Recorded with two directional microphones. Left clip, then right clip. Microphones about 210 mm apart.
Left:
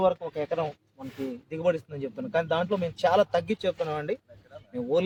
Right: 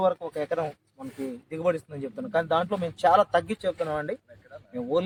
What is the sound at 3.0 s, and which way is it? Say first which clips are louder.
Speech: right 3 dB; 30° left (ahead or behind).